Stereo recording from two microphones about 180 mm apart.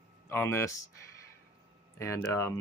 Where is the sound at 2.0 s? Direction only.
15° left (ahead or behind).